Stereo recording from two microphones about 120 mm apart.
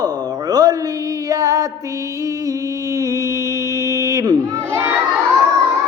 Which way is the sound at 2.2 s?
30° right (ahead or behind).